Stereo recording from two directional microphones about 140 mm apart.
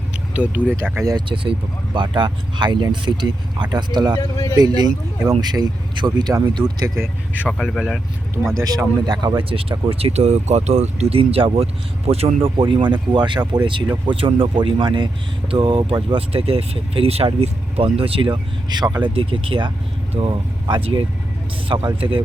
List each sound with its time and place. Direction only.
0.3 s speech: 10° right (ahead or behind)
0.9 s speech: 30° right (ahead or behind)
4.2 s speech: 25° left (ahead or behind)
4.5 s a man's voice: 30° right (ahead or behind)
7.6 s speech: centre (ahead or behind)
8.5 s a man's voice: 25° right (ahead or behind)
9.4 s speech: 40° right (ahead or behind)
12.5 s speech: 35° right (ahead or behind)